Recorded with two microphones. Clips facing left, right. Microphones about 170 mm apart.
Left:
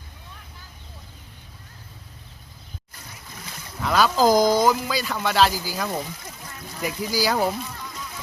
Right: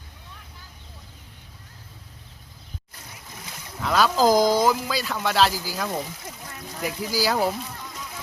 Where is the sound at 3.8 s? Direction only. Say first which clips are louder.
Left 1 dB; centre (ahead or behind).